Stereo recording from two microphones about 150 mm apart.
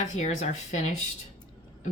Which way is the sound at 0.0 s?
55° left (ahead or behind).